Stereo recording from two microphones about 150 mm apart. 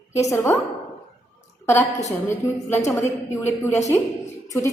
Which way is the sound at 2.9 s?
15° left (ahead or behind).